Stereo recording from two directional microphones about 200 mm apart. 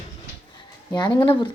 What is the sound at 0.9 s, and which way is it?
Speech, 20° left (ahead or behind).